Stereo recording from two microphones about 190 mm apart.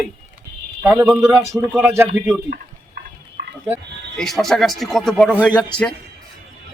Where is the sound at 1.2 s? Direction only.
10° right (ahead or behind).